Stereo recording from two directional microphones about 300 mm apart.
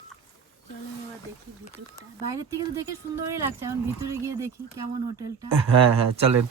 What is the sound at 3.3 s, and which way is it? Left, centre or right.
Speech, centre.